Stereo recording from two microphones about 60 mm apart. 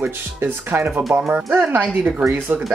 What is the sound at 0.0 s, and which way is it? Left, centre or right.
Speech, right.